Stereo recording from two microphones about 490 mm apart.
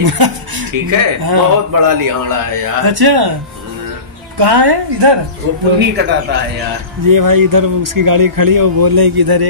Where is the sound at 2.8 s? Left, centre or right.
Right.